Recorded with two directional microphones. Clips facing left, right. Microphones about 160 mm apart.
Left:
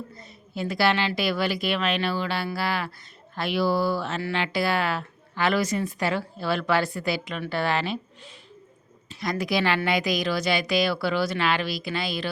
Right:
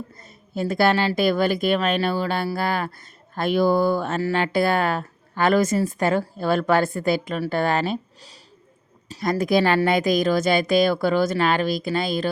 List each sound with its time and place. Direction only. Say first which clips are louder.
0.2 s speech: right 6 dB; 50° right (ahead or behind)